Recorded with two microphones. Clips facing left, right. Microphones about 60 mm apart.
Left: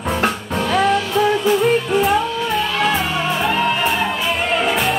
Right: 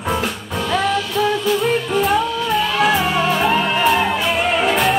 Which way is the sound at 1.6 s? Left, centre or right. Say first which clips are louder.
Left 2 dB; centre.